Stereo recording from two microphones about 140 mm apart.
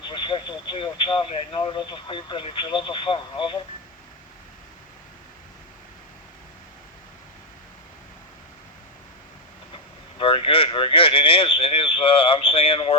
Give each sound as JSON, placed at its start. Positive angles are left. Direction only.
{"t": 0.0, "sound": "speech", "side_deg": 35}
{"t": 10.2, "sound": "speech", "side_deg": 40}